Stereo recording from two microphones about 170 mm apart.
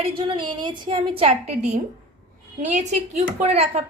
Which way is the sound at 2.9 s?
40° right (ahead or behind).